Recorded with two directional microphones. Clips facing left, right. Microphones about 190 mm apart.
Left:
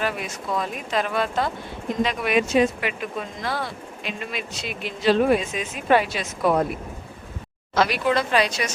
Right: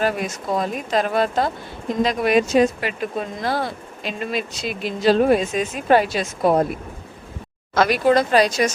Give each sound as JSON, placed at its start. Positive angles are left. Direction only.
{"t": 0.0, "sound": "speech", "side_deg": -40}
{"t": 7.8, "sound": "speech", "side_deg": -45}